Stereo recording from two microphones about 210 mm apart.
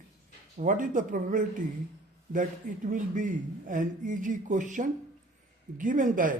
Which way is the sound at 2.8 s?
40° right (ahead or behind).